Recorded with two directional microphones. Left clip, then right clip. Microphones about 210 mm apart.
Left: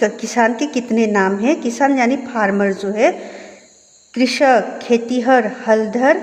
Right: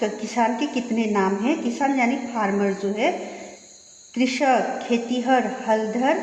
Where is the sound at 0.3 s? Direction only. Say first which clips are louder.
Left 6 dB; 30° left (ahead or behind).